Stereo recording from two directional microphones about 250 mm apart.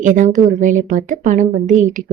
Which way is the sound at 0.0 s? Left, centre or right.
Right.